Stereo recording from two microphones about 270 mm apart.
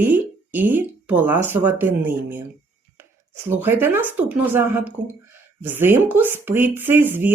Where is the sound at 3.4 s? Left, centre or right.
Centre.